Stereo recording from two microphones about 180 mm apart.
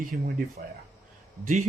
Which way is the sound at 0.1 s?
55° right (ahead or behind).